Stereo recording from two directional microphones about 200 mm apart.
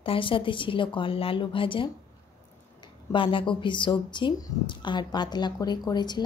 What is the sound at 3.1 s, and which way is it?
A woman's voice, 25° left (ahead or behind).